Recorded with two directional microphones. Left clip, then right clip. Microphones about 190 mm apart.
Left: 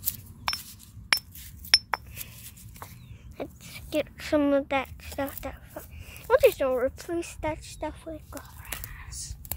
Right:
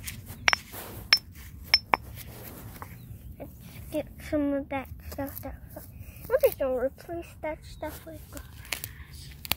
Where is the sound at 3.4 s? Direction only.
35° left (ahead or behind).